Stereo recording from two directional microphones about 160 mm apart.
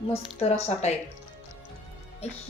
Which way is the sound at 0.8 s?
40° left (ahead or behind).